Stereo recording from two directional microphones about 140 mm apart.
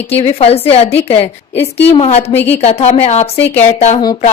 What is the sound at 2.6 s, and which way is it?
Speech, 50° left (ahead or behind).